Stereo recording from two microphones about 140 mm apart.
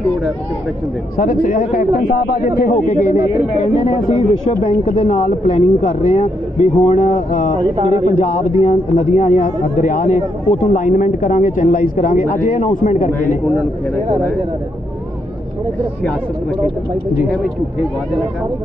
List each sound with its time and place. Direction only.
1.1 s a man's voice: 85° left; by 7.5 s 60° left (ahead or behind)
7.6 s a man's voice: 35° right (ahead or behind)
7.9 s a man's voice: 60° left (ahead or behind)